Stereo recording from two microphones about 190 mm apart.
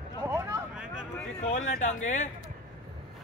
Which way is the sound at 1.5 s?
40° left (ahead or behind).